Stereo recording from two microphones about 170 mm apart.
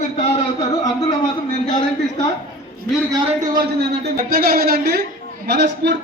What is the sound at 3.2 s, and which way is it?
Speech, 30° right (ahead or behind).